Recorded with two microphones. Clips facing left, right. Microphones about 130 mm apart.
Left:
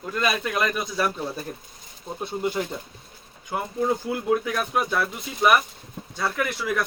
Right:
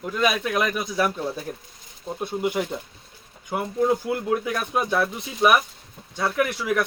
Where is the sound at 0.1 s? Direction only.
10° right (ahead or behind).